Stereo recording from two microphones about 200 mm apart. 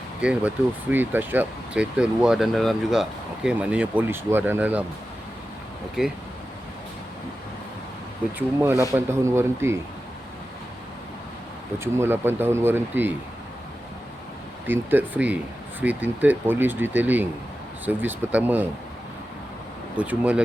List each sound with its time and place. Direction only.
0.2 s speech: 5° right (ahead or behind)
6.0 s speech: 5° right (ahead or behind)
8.4 s speech: 15° right (ahead or behind)
11.8 s speech: 10° right (ahead or behind)
14.7 s speech: 10° right (ahead or behind)
20.0 s speech: 5° right (ahead or behind)